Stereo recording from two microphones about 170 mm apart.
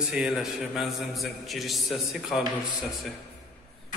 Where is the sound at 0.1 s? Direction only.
Centre (ahead or behind).